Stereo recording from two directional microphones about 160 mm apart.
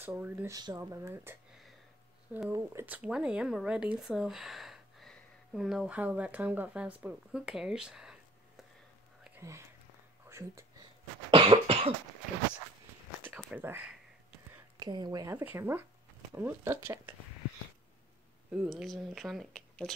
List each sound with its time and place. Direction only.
0.0 s speech: 10° right (ahead or behind)
0.6 s speech: 20° right (ahead or behind)
2.5 s speech: 15° right (ahead or behind)
9.4 s speech: 20° right (ahead or behind)
10.3 s whispering: 15° right (ahead or behind)
11.2 s cough: 35° right (ahead or behind)
13.2 s a sound: 10° right (ahead or behind)
14.8 s speech: 25° right (ahead or behind)
18.5 s speech: 5° right (ahead or behind)